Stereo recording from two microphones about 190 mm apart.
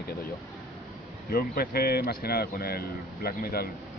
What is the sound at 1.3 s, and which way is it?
Speech, 55° left (ahead or behind).